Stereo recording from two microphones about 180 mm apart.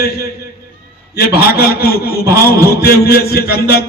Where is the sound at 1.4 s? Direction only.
60° left (ahead or behind).